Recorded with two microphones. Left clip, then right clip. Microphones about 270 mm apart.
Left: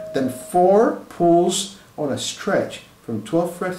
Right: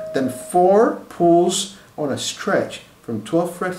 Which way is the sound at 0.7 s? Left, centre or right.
Centre.